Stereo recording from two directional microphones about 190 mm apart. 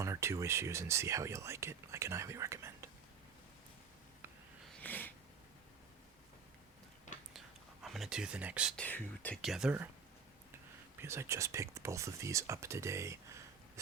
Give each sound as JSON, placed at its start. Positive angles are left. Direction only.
{"t": 0.0, "sound": "speech", "side_deg": -15}
{"t": 4.8, "sound": "a sound", "side_deg": 10}
{"t": 7.3, "sound": "whispering", "side_deg": 0}
{"t": 8.7, "sound": "speech", "side_deg": 10}
{"t": 11.0, "sound": "speech", "side_deg": -15}